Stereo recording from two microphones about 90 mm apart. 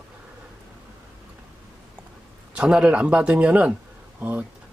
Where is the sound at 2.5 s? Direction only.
10° right (ahead or behind).